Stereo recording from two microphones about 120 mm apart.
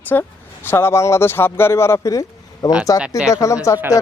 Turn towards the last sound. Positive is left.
turn(degrees=25)  # may be behind; listen again after turning